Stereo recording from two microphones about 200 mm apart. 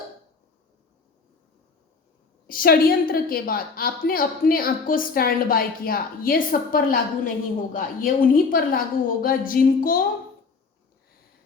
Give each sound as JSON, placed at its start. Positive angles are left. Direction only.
{"t": 2.5, "sound": "a woman's voice", "side_deg": 45}